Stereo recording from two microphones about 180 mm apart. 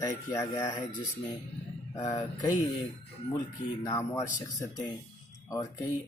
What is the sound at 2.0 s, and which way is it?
Speech, 20° left (ahead or behind).